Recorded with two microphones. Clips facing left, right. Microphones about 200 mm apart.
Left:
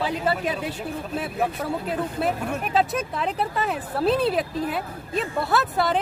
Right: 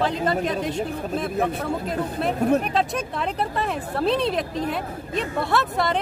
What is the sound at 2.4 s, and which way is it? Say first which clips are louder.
Speech: right 9 dB; 40° right (ahead or behind).